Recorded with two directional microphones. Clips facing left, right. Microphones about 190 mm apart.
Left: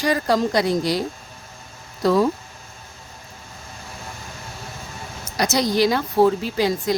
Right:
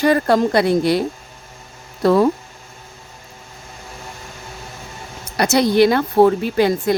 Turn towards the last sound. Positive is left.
turn(degrees=-55)  # may be behind; listen again after turning